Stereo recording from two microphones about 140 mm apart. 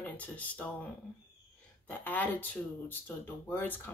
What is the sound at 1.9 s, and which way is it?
Speech, 10° left (ahead or behind).